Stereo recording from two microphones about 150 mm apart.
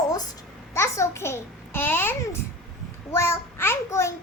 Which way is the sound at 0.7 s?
20° left (ahead or behind).